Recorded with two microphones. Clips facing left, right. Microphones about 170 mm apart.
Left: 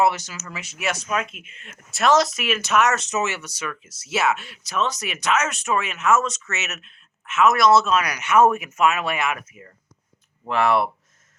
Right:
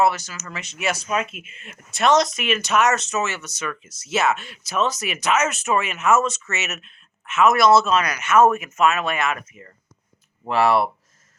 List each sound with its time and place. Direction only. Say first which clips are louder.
0.0 s speech: right 1 dB; 20° left (ahead or behind)
0.4 s speech: right 2 dB; 5° left (ahead or behind)
3.0 s speech: even; 15° left (ahead or behind); by 8.0 s centre (ahead or behind)
8.0 s speech: right 1 dB; 15° left (ahead or behind); by 10.8 s 5° right (ahead or behind)